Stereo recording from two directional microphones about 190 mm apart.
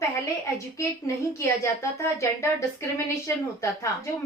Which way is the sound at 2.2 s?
15° left (ahead or behind).